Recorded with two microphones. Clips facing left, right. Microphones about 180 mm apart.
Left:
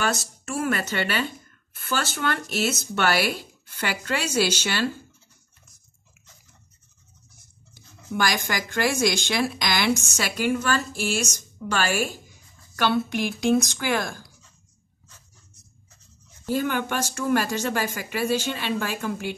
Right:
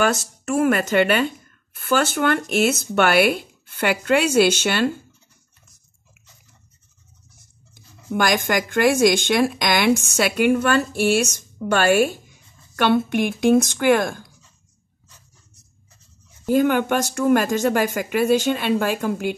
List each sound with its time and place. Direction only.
0.6 s a woman's voice: 50° right (ahead or behind)
8.1 s a woman's voice: 50° right (ahead or behind)
16.5 s a woman's voice: 50° right (ahead or behind)